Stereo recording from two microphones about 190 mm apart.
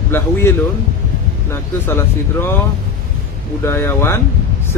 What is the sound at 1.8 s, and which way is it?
Speech, 10° left (ahead or behind).